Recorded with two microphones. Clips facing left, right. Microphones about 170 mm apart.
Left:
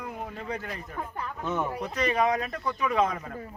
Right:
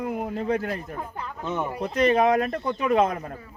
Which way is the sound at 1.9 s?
55° right (ahead or behind).